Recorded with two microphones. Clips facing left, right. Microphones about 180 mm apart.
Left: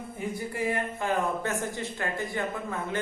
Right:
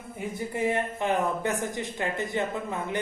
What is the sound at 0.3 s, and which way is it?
A man's voice, 20° right (ahead or behind).